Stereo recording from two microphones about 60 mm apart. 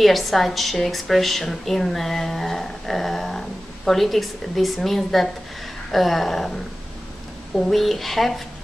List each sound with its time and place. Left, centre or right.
0.0 s a woman's voice: centre